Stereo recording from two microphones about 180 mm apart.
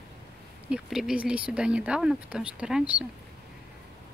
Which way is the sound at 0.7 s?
5° right (ahead or behind).